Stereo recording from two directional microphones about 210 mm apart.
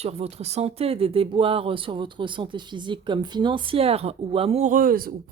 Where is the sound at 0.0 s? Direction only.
30° right (ahead or behind).